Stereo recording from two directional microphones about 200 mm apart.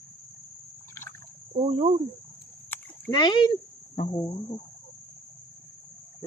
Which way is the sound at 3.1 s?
20° left (ahead or behind).